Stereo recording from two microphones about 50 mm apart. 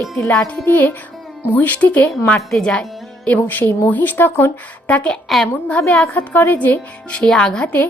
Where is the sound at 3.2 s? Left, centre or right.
Left.